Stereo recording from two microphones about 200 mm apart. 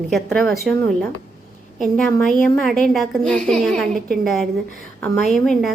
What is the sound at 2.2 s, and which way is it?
Speech, centre (ahead or behind).